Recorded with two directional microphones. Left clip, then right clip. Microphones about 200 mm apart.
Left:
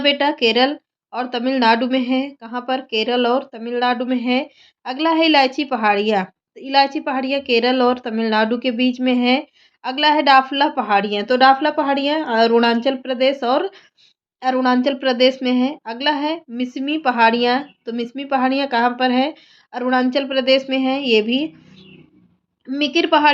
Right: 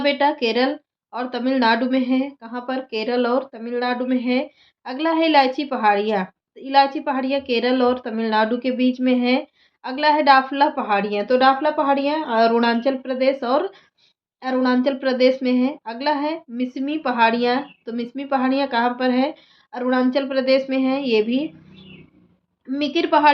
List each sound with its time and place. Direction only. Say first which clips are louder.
0.0 s speech: left 2 dB; 30° left (ahead or behind)
22.6 s speech: left 3 dB; 30° left (ahead or behind)